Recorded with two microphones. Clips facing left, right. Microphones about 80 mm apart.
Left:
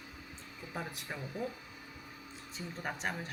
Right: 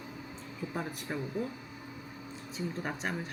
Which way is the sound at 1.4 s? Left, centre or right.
Centre.